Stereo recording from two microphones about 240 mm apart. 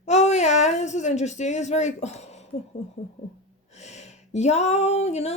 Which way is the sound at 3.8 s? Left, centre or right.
Left.